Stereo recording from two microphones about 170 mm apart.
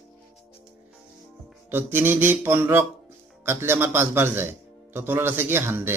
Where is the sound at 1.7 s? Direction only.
10° right (ahead or behind).